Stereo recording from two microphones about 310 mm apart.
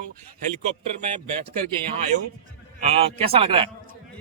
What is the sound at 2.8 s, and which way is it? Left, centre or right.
Speech, centre.